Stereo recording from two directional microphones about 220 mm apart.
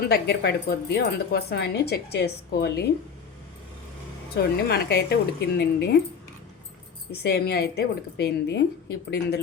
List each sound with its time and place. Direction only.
0.1 s speech: 45° left (ahead or behind)
4.7 s speech: 45° left (ahead or behind)
7.1 s speech: 45° left (ahead or behind)